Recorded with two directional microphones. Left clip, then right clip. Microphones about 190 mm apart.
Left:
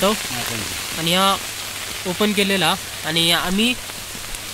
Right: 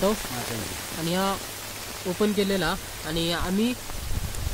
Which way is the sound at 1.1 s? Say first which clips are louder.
Left 10 dB; 15° left (ahead or behind).